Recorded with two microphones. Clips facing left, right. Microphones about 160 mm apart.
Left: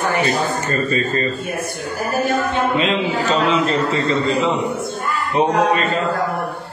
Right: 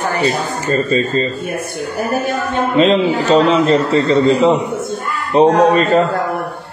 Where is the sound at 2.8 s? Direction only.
35° right (ahead or behind).